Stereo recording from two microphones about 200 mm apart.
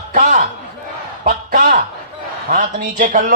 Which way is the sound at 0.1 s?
40° right (ahead or behind).